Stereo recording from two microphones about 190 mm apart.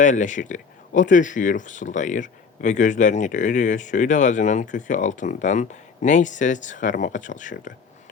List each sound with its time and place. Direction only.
0.0 s speech: 40° left (ahead or behind)